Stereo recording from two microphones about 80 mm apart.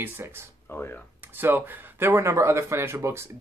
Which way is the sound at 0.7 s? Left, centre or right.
Left.